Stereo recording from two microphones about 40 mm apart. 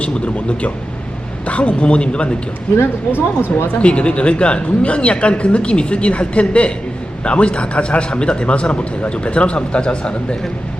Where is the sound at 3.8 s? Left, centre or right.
Left.